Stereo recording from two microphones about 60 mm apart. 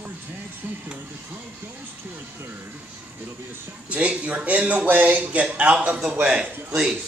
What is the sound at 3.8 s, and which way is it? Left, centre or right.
Speech, right.